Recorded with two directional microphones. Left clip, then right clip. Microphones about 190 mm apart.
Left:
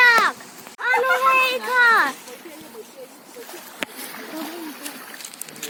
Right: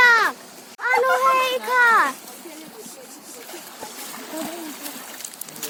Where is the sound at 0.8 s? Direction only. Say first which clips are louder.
Even; 35° left (ahead or behind).